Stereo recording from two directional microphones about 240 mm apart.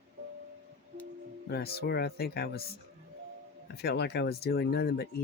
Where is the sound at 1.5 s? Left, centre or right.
Left.